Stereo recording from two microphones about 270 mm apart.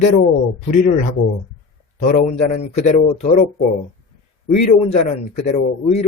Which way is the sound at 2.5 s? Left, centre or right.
Left.